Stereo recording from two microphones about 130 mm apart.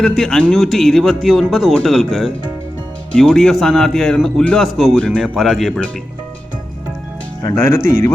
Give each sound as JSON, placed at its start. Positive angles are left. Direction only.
{"t": 0.0, "sound": "a man's voice", "side_deg": 5}
{"t": 7.5, "sound": "speech", "side_deg": 20}